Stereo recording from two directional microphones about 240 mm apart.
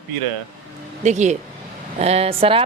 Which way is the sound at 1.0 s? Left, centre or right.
Right.